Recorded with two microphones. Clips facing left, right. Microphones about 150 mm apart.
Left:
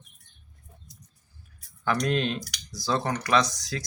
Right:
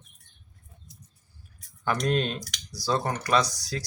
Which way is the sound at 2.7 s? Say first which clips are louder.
Even; 10° right (ahead or behind).